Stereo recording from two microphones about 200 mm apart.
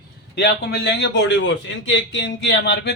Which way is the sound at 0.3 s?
55° left (ahead or behind).